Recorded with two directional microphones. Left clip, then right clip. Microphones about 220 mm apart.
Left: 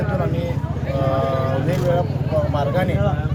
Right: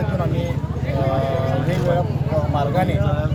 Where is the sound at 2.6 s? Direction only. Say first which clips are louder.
Even; 5° left (ahead or behind).